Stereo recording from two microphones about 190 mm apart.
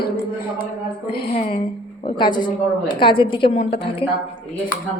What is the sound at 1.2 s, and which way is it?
A woman's voice, 35° left (ahead or behind).